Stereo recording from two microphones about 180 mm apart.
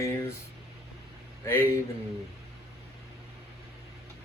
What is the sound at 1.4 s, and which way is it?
Speech, 10° left (ahead or behind).